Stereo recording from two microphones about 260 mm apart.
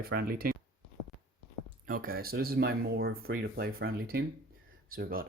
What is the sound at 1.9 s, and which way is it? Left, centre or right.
Speech, right.